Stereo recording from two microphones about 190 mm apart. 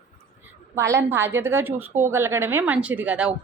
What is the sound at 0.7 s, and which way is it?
A woman's voice, 15° right (ahead or behind).